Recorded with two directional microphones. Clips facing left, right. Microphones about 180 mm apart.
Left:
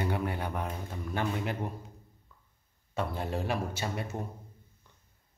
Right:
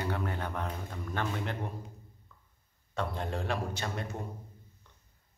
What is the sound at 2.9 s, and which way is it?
A man's voice, 5° left (ahead or behind).